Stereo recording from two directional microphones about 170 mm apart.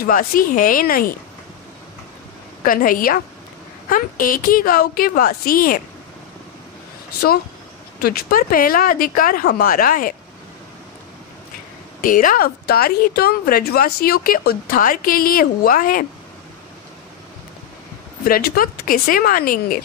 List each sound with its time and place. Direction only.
0.0 s a woman's voice: 55° left (ahead or behind)
2.6 s a woman's voice: 55° left (ahead or behind)
8.0 s a woman's voice: 60° left (ahead or behind)
12.0 s a woman's voice: 55° left (ahead or behind)
18.2 s a woman's voice: 60° left (ahead or behind)